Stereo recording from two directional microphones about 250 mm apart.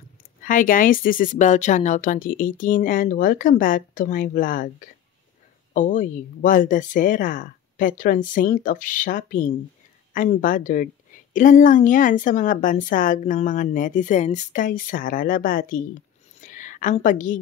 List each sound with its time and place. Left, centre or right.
0.4 s a woman's voice: left